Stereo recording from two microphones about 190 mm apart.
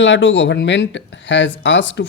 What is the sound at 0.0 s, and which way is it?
Speech, 80° left.